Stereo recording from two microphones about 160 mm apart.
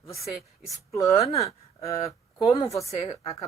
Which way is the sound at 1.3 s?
40° left (ahead or behind).